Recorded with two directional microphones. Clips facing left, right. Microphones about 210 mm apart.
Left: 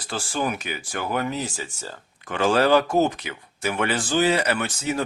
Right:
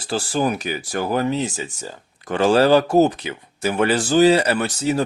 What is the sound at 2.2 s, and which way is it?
Speech, 35° right (ahead or behind).